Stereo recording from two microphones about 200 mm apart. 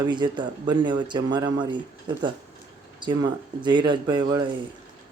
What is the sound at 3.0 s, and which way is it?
Speech, 20° right (ahead or behind).